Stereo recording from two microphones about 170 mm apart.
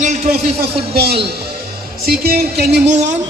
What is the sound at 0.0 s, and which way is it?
Speech, 45° right (ahead or behind).